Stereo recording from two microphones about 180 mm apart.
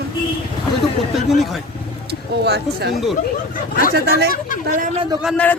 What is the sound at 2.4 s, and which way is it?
Speech, 65° right (ahead or behind).